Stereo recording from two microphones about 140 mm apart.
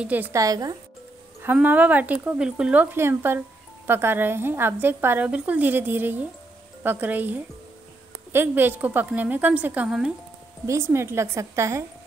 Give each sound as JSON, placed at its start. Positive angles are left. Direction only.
{"t": 0.0, "sound": "speech", "side_deg": -10}
{"t": 0.4, "sound": "a woman's voice", "side_deg": -25}
{"t": 1.4, "sound": "speech", "side_deg": -10}
{"t": 10.7, "sound": "a woman's voice", "side_deg": -20}